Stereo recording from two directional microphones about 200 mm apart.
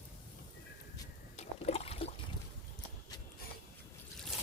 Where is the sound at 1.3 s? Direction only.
30° left (ahead or behind).